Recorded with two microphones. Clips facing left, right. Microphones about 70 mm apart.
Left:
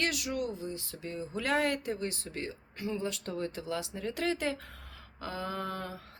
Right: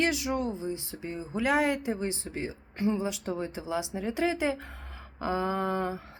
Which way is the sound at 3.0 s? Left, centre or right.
Centre.